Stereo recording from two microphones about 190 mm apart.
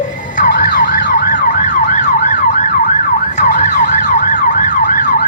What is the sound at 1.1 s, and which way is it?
Emergency vehicle, 45° left (ahead or behind).